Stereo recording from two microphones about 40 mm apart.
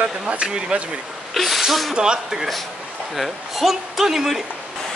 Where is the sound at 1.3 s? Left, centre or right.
Centre.